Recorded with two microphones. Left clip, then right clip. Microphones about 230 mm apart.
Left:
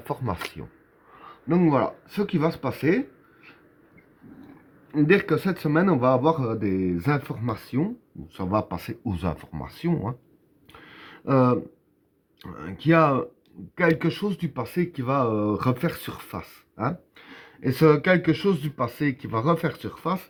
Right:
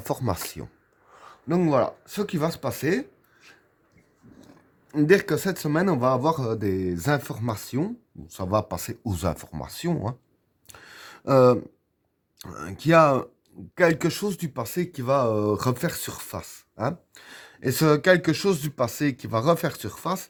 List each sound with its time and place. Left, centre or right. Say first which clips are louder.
0.0 s speech: right 2 dB; right
4.9 s speech: right 1 dB; right
10.7 s a sound: right 1 dB; right
12.4 s speech: right 1 dB; right